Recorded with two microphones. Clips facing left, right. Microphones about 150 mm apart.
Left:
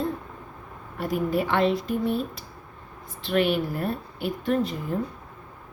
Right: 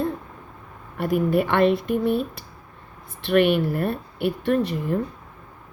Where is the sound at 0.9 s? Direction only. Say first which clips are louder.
Right 4 dB; 60° right (ahead or behind).